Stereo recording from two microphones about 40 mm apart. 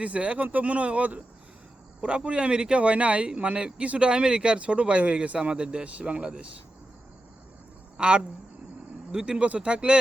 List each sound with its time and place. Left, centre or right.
0.0 s speech: right
7.9 s a man's voice: right